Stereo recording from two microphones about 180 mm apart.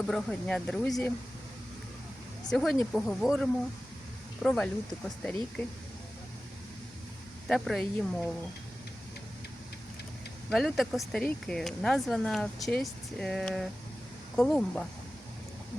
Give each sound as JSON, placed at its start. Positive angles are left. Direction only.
{"t": 0.1, "sound": "speech", "side_deg": 5}
{"t": 2.5, "sound": "speech", "side_deg": 0}
{"t": 7.4, "sound": "speech", "side_deg": 0}
{"t": 10.5, "sound": "speech", "side_deg": 0}